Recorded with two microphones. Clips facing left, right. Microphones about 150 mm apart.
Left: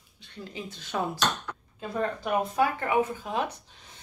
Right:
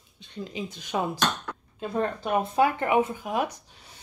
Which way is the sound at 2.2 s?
25° right (ahead or behind).